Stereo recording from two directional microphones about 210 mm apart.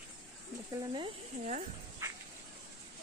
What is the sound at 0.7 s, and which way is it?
Speech, 25° right (ahead or behind).